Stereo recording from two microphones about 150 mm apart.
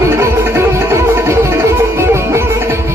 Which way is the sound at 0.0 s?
20° right (ahead or behind).